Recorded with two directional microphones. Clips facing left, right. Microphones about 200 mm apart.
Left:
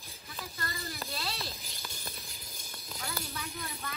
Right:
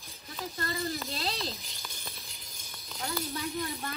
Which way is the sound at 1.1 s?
25° right (ahead or behind).